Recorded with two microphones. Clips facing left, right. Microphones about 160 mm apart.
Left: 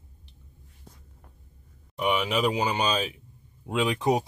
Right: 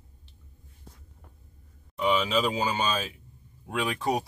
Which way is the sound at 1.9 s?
15° left (ahead or behind).